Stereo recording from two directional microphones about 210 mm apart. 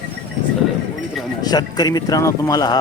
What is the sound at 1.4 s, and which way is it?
Speech, 20° left (ahead or behind).